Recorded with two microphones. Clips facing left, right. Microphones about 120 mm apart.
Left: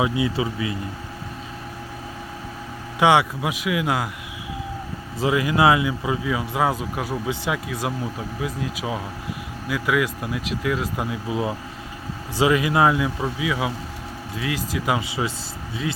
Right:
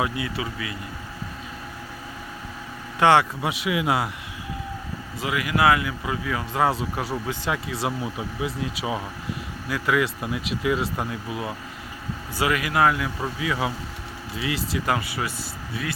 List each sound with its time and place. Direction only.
0.0 s speech: 20° left (ahead or behind)
3.0 s speech: 10° left (ahead or behind)
5.2 s speech: 25° left (ahead or behind); by 10.8 s 5° right (ahead or behind)
10.9 s speech: 10° left (ahead or behind)
11.3 s speech: 20° left (ahead or behind)
13.2 s speech: 5° left (ahead or behind)
14.8 s speech: 20° left (ahead or behind)